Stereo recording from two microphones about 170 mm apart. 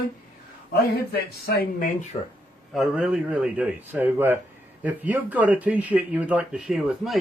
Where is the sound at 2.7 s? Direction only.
Centre (ahead or behind).